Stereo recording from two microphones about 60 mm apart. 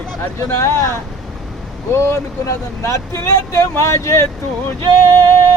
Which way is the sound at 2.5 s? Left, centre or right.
Left.